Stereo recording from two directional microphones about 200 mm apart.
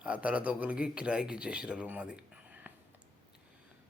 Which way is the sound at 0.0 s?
5° right (ahead or behind).